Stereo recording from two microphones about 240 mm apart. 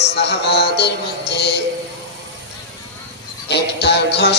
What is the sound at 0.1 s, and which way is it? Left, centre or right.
Music, left.